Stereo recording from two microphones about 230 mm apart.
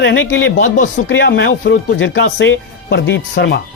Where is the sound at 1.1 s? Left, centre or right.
Left.